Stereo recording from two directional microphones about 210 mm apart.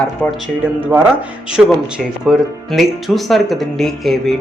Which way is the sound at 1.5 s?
5° right (ahead or behind).